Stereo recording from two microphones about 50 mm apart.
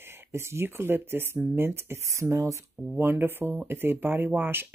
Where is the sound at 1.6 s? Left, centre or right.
Right.